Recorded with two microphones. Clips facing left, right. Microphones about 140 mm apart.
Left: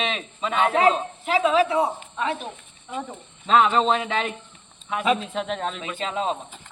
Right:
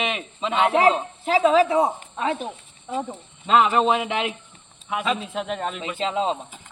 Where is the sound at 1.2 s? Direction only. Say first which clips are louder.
Right 3 dB; 35° right (ahead or behind).